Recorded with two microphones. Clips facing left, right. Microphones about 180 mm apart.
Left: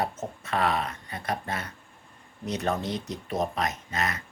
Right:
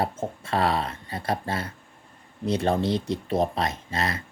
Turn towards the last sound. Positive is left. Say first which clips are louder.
# right 2 dB
turn(degrees=-30)  # may be behind; listen again after turning